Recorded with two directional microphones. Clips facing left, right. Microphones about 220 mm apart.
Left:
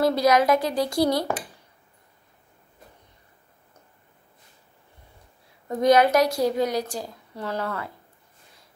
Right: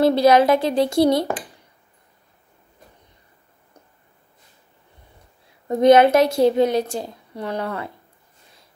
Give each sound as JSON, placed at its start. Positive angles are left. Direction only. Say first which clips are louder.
{"t": 0.0, "sound": "a woman's voice", "louder": "right 5 dB", "side_deg": -30}
{"t": 5.7, "sound": "a woman's voice", "louder": "right 5 dB", "side_deg": -25}